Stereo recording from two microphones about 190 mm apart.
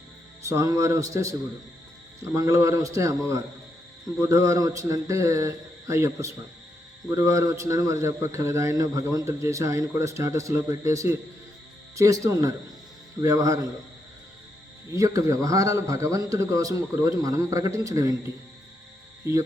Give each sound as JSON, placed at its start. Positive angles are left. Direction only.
{"t": 0.4, "sound": "a man's voice", "side_deg": -15}
{"t": 14.9, "sound": "a man's voice", "side_deg": -20}